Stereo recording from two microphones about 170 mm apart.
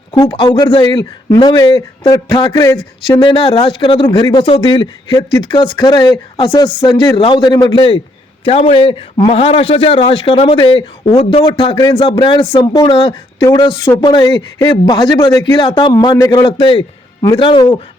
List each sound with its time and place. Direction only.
0.1 s a man's voice: 30° left (ahead or behind)
2.7 s a man's voice: 30° left (ahead or behind)